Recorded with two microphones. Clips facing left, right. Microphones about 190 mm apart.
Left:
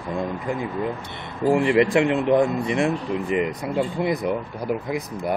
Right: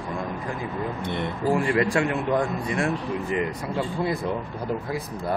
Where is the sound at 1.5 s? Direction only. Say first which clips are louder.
Left 5 dB; 20° left (ahead or behind).